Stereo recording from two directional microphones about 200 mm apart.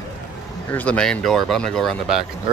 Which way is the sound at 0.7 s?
5° left (ahead or behind).